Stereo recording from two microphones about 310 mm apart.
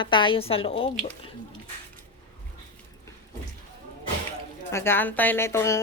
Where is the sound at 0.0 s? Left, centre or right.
Centre.